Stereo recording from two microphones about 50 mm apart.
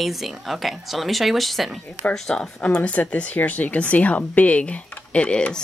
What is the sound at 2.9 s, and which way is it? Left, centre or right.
Speech, left.